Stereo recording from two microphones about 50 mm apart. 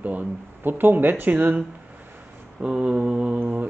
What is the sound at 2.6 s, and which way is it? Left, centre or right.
Mantra, right.